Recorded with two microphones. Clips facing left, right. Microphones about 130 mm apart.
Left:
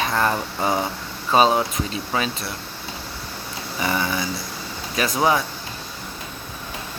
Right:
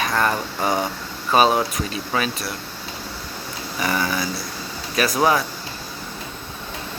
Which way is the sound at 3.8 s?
20° left (ahead or behind).